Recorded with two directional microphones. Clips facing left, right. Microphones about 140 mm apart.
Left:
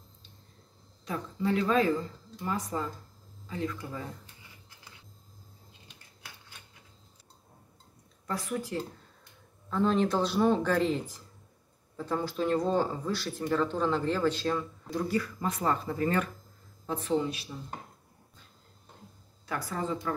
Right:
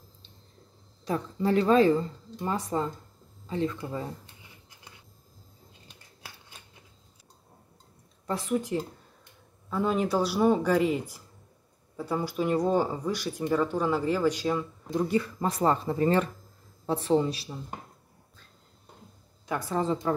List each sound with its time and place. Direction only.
1.0 s speech: 35° right (ahead or behind)
8.3 s speech: 20° right (ahead or behind)
9.7 s speech: 10° right (ahead or behind); by 17.5 s 35° right (ahead or behind)
19.4 s speech: 20° right (ahead or behind)